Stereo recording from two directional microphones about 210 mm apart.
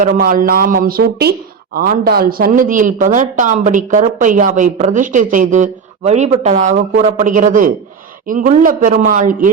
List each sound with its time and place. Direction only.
0.0 s speech: 40° right (ahead or behind)